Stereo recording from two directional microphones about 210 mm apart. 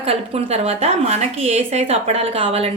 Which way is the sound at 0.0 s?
30° right (ahead or behind).